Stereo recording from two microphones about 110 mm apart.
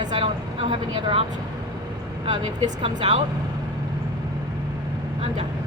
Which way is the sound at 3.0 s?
60° right (ahead or behind).